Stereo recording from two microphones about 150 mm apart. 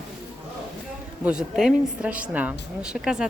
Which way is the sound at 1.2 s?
5° right (ahead or behind).